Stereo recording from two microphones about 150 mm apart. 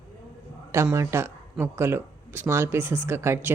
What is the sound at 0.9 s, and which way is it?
A man's voice, 20° right (ahead or behind).